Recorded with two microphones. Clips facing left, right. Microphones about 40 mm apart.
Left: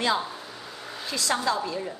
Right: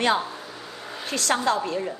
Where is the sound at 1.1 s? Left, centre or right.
Right.